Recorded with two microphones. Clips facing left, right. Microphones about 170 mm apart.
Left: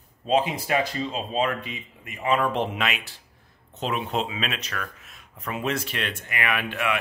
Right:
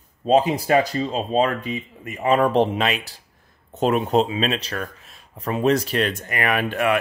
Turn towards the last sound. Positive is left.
turn(degrees=-40)  # may be behind; listen again after turning